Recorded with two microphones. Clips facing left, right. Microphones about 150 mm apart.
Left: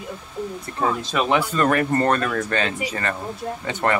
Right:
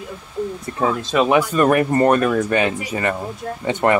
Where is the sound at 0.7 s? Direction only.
10° right (ahead or behind).